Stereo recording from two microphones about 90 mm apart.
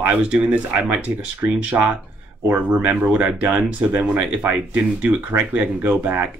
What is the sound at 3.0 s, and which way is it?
Speech, 15° right (ahead or behind).